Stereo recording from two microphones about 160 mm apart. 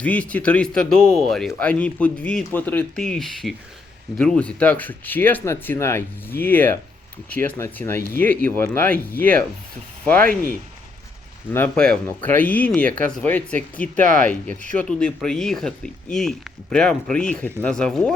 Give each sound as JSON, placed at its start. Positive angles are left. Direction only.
{"t": 0.0, "sound": "speech", "side_deg": 10}
{"t": 11.5, "sound": "speech", "side_deg": 10}
{"t": 14.0, "sound": "speech", "side_deg": -50}
{"t": 14.3, "sound": "speech", "side_deg": 10}